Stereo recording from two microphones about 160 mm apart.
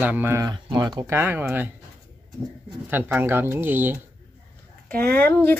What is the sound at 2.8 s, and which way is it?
Speech, 10° right (ahead or behind).